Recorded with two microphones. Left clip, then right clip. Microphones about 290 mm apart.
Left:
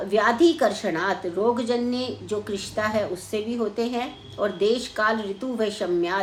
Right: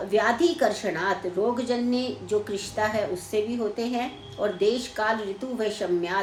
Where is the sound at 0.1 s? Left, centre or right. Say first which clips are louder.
Left 3 dB; centre.